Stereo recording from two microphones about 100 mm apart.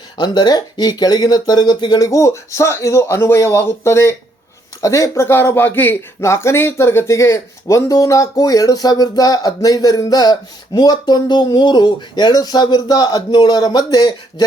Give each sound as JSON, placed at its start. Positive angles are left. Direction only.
{"t": 0.2, "sound": "speech", "side_deg": 45}